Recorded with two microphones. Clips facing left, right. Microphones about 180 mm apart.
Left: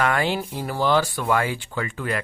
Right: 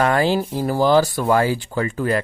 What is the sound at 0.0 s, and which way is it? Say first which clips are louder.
Speech: right 5 dB; 35° right (ahead or behind).